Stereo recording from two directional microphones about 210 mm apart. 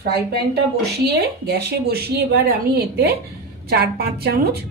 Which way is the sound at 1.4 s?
50° right (ahead or behind).